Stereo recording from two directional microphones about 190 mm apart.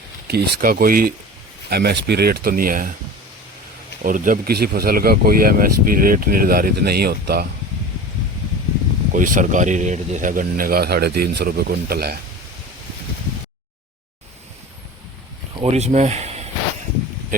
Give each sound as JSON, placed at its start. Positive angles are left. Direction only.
{"t": 0.3, "sound": "speech", "side_deg": -55}
{"t": 4.0, "sound": "speech", "side_deg": -45}
{"t": 9.1, "sound": "speech", "side_deg": -45}
{"t": 15.6, "sound": "speech", "side_deg": -35}